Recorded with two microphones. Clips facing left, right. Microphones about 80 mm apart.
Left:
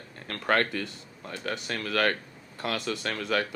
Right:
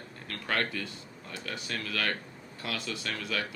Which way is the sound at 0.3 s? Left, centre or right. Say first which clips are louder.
Left 6 dB; left.